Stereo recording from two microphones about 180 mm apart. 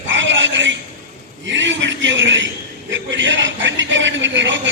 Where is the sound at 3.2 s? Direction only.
90° right.